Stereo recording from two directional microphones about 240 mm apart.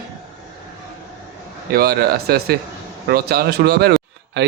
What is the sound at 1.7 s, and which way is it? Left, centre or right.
Speech, right.